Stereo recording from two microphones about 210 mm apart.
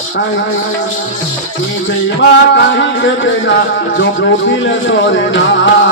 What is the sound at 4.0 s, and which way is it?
Speech, 60° left (ahead or behind).